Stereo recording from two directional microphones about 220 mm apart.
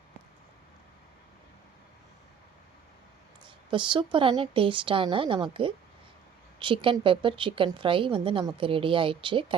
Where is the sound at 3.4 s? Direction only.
20° right (ahead or behind).